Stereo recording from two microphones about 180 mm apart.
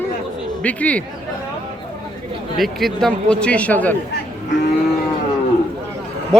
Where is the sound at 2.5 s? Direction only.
Centre (ahead or behind).